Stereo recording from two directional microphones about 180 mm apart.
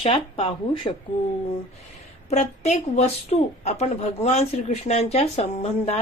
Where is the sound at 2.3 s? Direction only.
40° left (ahead or behind).